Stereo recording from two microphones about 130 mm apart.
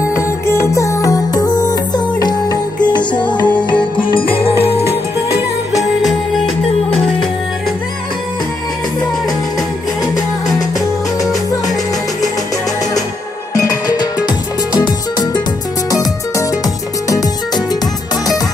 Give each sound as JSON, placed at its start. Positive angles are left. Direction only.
{"t": 0.1, "sound": "music", "side_deg": 20}
{"t": 3.4, "sound": "music", "side_deg": 10}
{"t": 4.1, "sound": "music", "side_deg": 45}
{"t": 13.6, "sound": "music", "side_deg": 30}